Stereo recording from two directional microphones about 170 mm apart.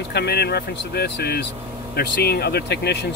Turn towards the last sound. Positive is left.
turn(degrees=75)  # may be behind; listen again after turning